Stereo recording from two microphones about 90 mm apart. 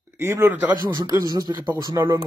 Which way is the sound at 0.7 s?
55° right (ahead or behind).